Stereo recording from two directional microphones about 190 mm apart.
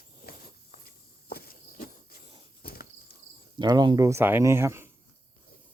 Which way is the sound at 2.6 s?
50° left (ahead or behind).